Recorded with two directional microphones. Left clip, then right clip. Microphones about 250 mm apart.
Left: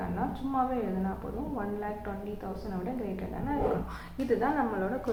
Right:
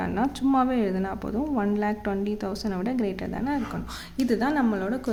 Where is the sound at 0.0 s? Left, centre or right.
Right.